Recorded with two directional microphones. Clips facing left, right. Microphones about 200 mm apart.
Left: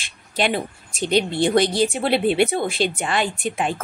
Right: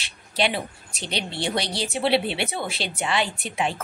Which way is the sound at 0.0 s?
50° left (ahead or behind).